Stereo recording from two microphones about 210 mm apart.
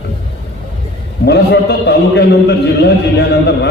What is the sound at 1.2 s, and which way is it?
A man's voice, 50° left (ahead or behind).